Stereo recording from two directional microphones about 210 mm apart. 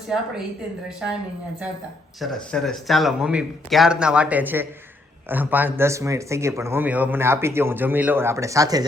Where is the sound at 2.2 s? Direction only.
Centre (ahead or behind).